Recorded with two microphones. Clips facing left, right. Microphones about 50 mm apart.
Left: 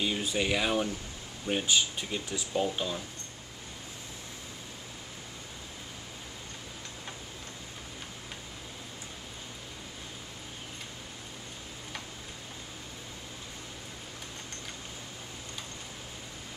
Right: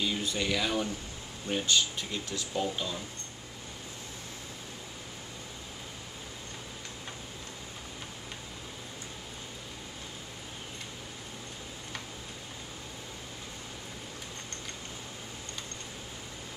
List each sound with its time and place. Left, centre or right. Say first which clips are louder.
0.0 s speech: left 1 dB; centre